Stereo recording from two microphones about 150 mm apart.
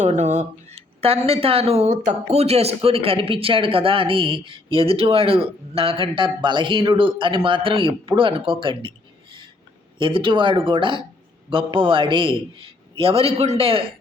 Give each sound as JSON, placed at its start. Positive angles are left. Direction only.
{"t": 0.0, "sound": "speech", "side_deg": -50}
{"t": 10.0, "sound": "speech", "side_deg": -35}